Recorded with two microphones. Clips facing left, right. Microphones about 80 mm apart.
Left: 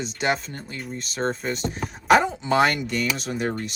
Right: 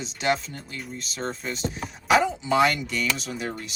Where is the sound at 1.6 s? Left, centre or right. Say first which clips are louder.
Left 2 dB; left.